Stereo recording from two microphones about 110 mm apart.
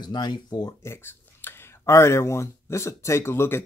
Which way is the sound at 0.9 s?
20° left (ahead or behind).